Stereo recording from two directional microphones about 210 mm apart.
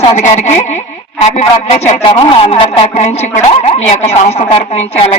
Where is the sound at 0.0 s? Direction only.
30° left (ahead or behind).